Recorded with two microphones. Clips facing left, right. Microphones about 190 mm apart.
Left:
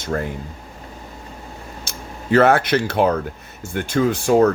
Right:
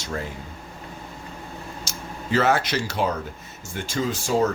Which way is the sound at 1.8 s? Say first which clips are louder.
Left 2 dB; 60° left (ahead or behind).